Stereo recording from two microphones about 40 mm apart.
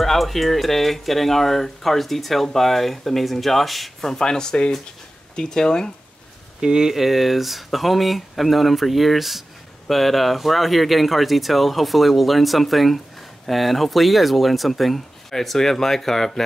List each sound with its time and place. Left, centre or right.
0.0 s speech: centre
4.0 s speech: centre
6.6 s speech: centre